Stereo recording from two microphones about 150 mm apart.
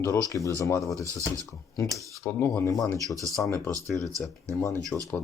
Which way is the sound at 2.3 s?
15° left (ahead or behind).